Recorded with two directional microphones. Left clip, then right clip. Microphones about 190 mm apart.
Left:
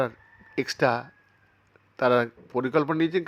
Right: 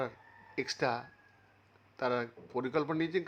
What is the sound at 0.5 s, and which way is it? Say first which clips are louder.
Speech: left 9 dB; 25° left (ahead or behind).